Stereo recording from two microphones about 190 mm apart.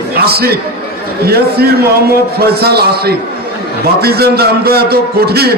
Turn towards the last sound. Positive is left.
turn(degrees=-55)  # may be behind; listen again after turning